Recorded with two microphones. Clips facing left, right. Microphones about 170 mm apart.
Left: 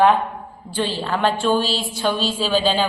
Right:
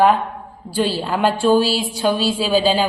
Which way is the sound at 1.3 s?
40° right (ahead or behind).